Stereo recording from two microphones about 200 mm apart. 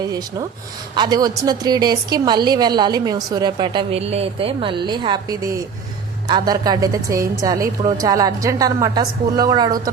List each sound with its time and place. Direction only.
0.0 s a woman's voice: 20° right (ahead or behind)